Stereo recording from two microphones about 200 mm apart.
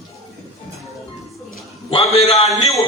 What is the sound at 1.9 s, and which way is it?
Speech, 30° left (ahead or behind).